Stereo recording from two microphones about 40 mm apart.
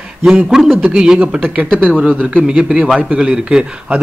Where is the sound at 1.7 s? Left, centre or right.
Right.